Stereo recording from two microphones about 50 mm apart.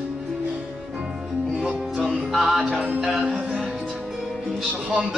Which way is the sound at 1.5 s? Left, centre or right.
Centre.